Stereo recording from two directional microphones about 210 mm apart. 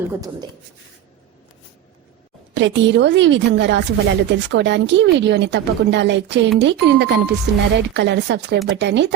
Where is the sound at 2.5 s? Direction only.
60° right (ahead or behind).